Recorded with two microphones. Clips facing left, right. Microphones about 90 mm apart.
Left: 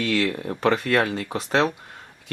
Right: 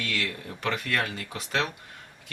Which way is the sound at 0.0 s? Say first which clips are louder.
Left 9 dB; 35° left (ahead or behind).